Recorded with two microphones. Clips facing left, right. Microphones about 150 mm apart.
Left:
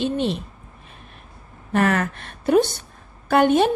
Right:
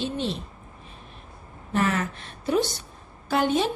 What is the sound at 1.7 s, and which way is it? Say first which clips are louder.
A woman's voice: left 5 dB; 60° left (ahead or behind).